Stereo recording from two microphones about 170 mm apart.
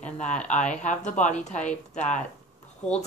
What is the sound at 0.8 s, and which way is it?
A woman's voice, 45° left (ahead or behind).